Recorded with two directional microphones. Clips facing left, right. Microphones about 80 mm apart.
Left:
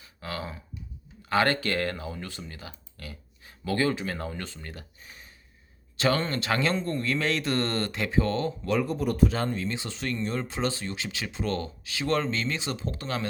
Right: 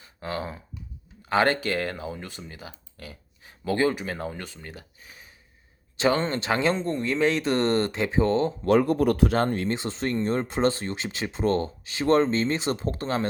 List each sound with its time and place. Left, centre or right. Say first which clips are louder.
0.0 s speech: right 4 dB; right; by 5.3 s centre
6.0 s speech: right 3 dB; right
8.6 s speech: right 8 dB; right
9.6 s speech: right 5 dB; right